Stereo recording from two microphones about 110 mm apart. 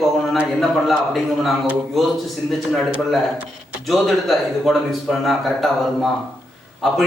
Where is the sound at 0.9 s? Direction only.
Centre (ahead or behind).